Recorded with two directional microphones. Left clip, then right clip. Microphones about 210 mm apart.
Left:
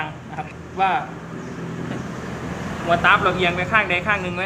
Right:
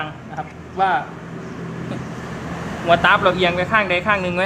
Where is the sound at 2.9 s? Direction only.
40° right (ahead or behind).